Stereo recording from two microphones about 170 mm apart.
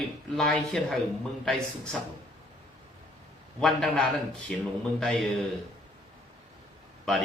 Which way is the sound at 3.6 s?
Centre (ahead or behind).